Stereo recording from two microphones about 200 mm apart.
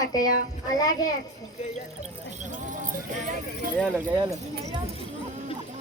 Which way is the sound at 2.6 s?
40° right (ahead or behind).